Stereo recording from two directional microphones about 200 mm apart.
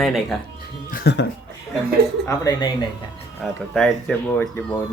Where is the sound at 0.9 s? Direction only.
50° left (ahead or behind).